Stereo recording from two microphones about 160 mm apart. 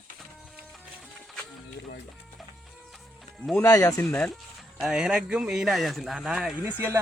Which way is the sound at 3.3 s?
Centre (ahead or behind).